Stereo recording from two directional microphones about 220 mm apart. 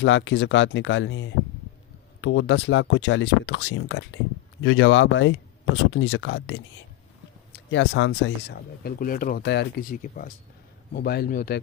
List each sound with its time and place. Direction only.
0.0 s speech: 60° left (ahead or behind); by 11.6 s 40° left (ahead or behind)